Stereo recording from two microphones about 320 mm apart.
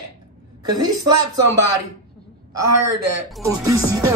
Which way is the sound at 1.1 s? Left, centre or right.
Right.